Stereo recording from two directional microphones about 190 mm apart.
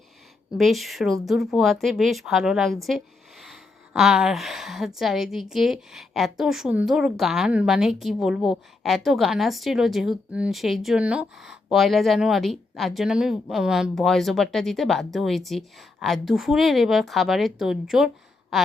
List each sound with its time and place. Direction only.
0.5 s a woman's voice: centre (ahead or behind)
3.4 s a sound: centre (ahead or behind)
4.9 s a woman's voice: centre (ahead or behind)